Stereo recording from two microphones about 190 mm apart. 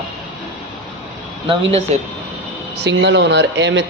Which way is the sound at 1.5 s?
35° right (ahead or behind).